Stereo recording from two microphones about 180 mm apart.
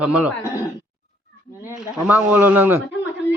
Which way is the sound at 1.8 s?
10° right (ahead or behind).